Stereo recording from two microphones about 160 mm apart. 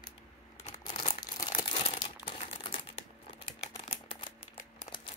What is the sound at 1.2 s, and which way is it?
Crumpling, 25° left (ahead or behind).